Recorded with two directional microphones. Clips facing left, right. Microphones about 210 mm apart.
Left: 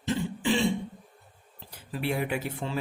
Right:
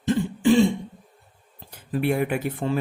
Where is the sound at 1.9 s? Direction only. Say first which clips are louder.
Right 6 dB; 50° right (ahead or behind).